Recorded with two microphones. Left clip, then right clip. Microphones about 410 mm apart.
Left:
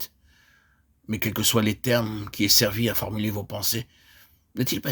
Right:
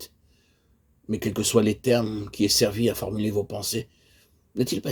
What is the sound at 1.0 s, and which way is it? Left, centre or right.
Speech, left.